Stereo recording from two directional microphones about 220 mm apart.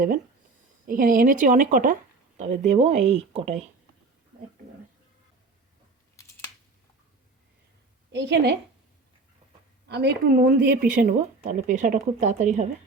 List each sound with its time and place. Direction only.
0.9 s a woman's voice: 40° right (ahead or behind)
8.1 s a woman's voice: 50° right (ahead or behind)
9.9 s a woman's voice: 50° right (ahead or behind); by 12.6 s 35° right (ahead or behind)